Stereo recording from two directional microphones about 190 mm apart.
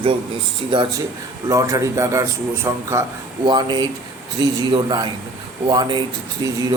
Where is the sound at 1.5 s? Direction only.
15° right (ahead or behind).